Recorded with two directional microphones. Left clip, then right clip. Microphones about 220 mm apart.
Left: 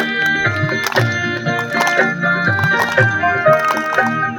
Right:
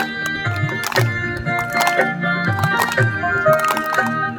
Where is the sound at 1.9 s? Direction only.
25° left (ahead or behind).